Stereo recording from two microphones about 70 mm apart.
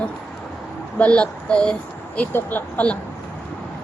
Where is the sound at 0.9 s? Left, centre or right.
Centre.